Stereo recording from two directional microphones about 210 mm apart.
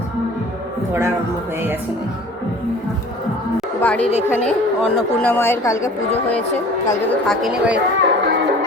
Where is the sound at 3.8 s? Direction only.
5° left (ahead or behind).